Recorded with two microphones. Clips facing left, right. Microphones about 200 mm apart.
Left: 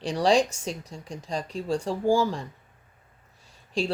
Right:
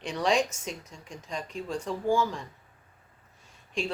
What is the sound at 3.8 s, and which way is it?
Speech, 35° left (ahead or behind).